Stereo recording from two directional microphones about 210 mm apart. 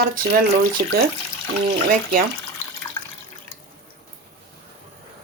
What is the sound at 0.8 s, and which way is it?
Speech, 35° right (ahead or behind).